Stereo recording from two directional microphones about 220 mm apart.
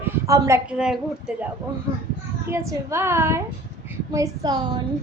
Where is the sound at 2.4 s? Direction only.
10° right (ahead or behind).